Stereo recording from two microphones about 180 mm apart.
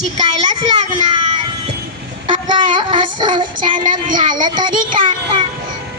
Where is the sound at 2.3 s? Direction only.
25° right (ahead or behind).